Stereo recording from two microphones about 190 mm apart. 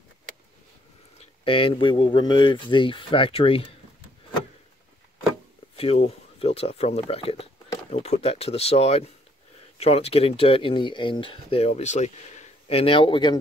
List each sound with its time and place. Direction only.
1.4 s speech: 30° left (ahead or behind)
5.8 s speech: 30° left (ahead or behind)